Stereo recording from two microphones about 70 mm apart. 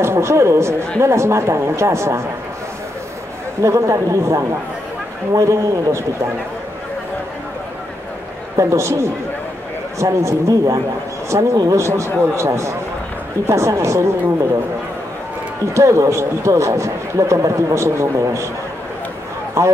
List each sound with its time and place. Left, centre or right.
0.0 s speech: right
3.6 s a man's voice: right
8.5 s a man's voice: right
11.7 s a man's voice: right
15.7 s a man's voice: right
19.6 s a man's voice: right